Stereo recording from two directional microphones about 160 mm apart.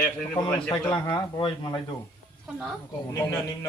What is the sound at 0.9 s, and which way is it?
Speech, 30° left (ahead or behind).